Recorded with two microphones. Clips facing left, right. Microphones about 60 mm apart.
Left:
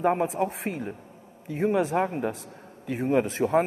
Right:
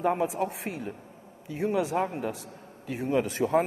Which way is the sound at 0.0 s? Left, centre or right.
Left.